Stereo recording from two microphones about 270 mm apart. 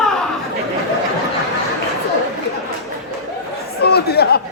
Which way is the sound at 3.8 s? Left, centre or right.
Left.